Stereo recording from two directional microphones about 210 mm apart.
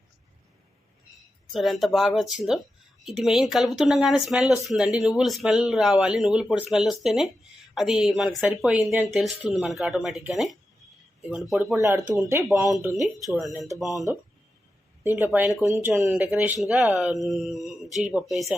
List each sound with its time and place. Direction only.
1.5 s speech: centre (ahead or behind)
11.8 s speech: 15° right (ahead or behind)
13.8 s speech: 15° left (ahead or behind)
15.0 s speech: 10° right (ahead or behind)